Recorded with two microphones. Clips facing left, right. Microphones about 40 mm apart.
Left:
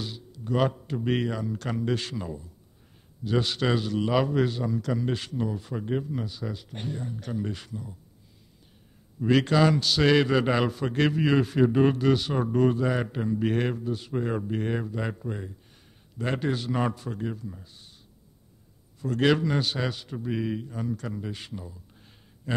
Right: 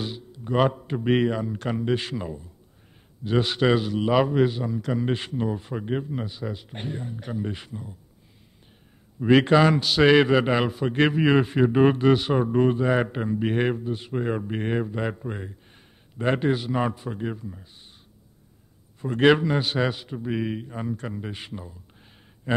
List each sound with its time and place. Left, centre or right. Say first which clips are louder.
0.0 s a man's voice: right 4 dB; right
9.2 s a man's voice: right 4 dB; right
18.9 s a man's voice: right 5 dB; right